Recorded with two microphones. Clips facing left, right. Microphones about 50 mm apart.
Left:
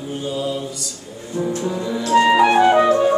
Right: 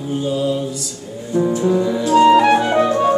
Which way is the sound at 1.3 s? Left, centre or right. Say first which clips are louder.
Right 5 dB; right.